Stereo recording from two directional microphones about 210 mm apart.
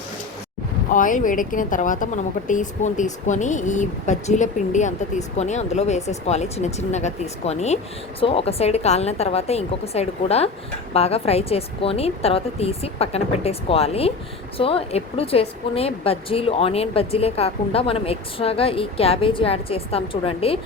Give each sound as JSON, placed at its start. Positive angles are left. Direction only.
{"t": 0.9, "sound": "a woman's voice", "side_deg": 40}